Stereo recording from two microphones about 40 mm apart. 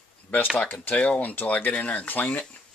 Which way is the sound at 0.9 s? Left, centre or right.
Left.